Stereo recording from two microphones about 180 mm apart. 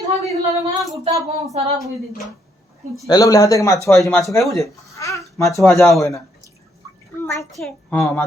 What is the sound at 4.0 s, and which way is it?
Speech, centre (ahead or behind).